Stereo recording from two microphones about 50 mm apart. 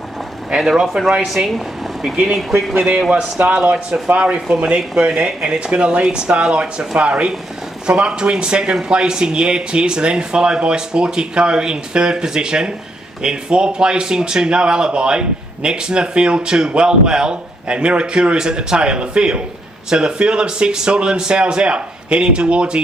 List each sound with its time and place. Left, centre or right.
0.6 s speech: centre
2.7 s a man's voice: right
4.1 s a man's voice: right